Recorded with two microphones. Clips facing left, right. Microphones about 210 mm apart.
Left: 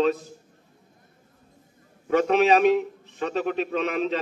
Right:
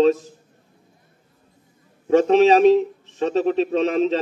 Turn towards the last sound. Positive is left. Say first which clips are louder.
# right 6 dB
turn(degrees=-35)  # may be behind; listen again after turning